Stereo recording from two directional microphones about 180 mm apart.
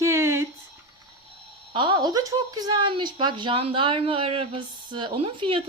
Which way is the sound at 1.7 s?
25° right (ahead or behind).